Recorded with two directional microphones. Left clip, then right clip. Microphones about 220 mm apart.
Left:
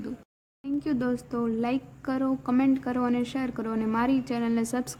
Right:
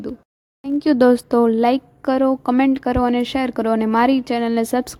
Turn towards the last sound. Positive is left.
turn(degrees=-35)  # may be behind; listen again after turning